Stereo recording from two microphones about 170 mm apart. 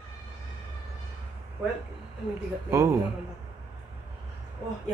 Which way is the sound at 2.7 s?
15° right (ahead or behind).